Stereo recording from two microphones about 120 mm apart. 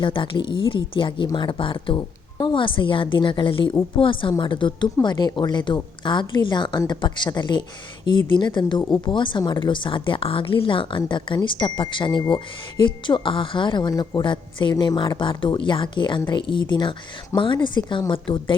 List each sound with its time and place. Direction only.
0.0 s speech: 45° left (ahead or behind)